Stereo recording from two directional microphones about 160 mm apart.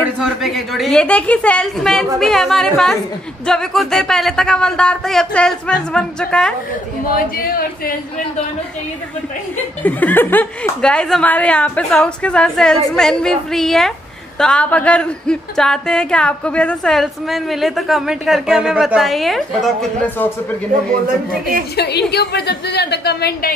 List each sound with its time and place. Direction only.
0.2 s speech: centre (ahead or behind)
7.3 s speech: 70° left (ahead or behind)
9.8 s speech: 10° left (ahead or behind)
20.7 s a man's voice: 60° right (ahead or behind)
21.7 s a woman's voice: 90° left